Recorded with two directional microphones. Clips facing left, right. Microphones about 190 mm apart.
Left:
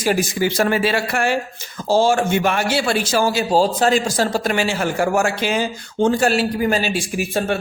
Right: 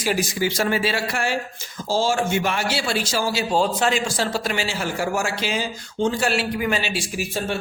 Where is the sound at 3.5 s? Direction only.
35° left (ahead or behind).